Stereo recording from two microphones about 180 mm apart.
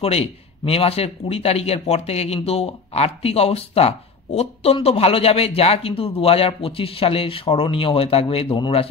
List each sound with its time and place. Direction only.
0.0 s speech: 35° left (ahead or behind)